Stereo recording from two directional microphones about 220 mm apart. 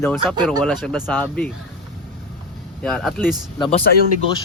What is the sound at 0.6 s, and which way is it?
Speech, centre (ahead or behind).